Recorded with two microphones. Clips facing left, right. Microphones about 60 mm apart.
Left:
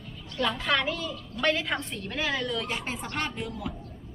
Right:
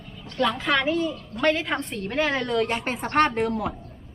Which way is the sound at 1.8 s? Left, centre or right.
Right.